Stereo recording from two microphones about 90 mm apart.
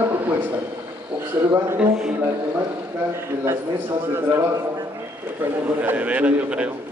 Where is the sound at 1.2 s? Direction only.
25° right (ahead or behind).